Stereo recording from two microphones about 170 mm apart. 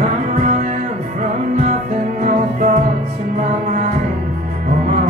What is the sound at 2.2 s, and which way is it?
Music, 45° right (ahead or behind).